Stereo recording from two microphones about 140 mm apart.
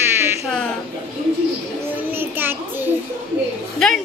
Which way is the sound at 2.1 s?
15° right (ahead or behind).